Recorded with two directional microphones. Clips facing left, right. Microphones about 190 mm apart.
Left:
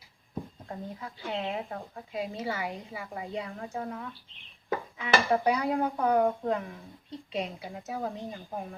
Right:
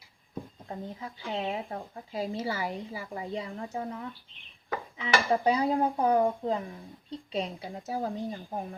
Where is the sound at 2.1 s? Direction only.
30° right (ahead or behind).